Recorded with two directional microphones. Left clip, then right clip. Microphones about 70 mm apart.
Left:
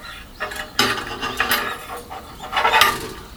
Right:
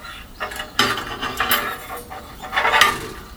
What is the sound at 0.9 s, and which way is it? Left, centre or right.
Mechanisms, centre.